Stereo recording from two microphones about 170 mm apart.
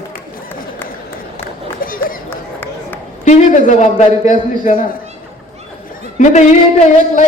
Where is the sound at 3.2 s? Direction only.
45° left (ahead or behind).